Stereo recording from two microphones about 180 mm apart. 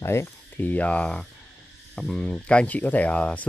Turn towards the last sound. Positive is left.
turn(degrees=5)  # may be behind; listen again after turning